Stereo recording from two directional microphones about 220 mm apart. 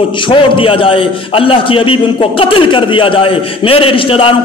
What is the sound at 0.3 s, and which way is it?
A man's voice, 25° left (ahead or behind).